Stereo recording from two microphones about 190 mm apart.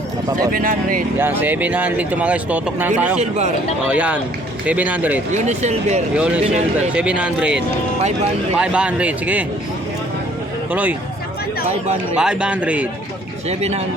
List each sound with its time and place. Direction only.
0.5 s speech: 45° right (ahead or behind)
1.2 s speech: 10° right (ahead or behind)
3.2 s speech: 40° right (ahead or behind)
3.8 s speech: 5° right (ahead or behind)
5.3 s speech: 35° right (ahead or behind)
6.1 s a man's voice: 5° right (ahead or behind)
10.7 s speech: 10° right (ahead or behind)
12.1 s a man's voice: 5° right (ahead or behind)
13.5 s speech: 35° right (ahead or behind)